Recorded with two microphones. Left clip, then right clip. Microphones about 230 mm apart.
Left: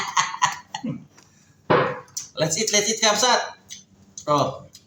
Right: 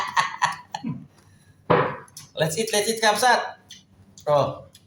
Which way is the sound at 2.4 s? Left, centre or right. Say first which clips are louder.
Left 1 dB; right.